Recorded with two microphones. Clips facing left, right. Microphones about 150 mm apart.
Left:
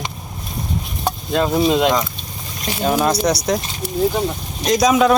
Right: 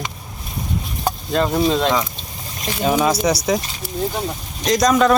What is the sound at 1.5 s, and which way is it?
Speech, 10° left (ahead or behind).